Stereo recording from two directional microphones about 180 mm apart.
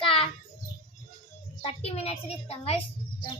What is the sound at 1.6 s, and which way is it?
A child's voice, 35° left (ahead or behind).